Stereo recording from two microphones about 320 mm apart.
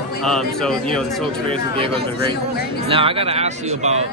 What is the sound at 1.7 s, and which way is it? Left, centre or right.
A man's voice, centre.